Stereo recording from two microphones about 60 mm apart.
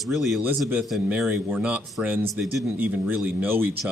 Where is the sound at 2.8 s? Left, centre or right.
Right.